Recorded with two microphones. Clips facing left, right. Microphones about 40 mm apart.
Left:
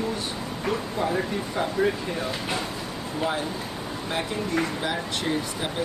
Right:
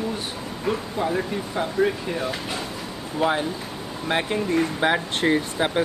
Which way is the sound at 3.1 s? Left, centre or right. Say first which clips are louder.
Right 5 dB; right.